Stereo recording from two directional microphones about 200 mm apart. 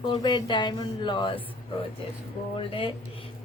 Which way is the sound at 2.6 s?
25° left (ahead or behind).